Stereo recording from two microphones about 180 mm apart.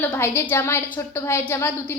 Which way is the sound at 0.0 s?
10° left (ahead or behind).